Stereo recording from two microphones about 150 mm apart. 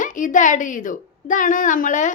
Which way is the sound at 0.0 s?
60° left (ahead or behind).